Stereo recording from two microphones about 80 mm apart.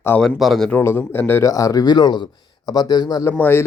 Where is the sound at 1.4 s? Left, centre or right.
Left.